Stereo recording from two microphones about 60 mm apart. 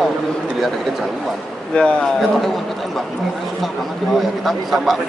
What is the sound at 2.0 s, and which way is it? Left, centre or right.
Speech, centre.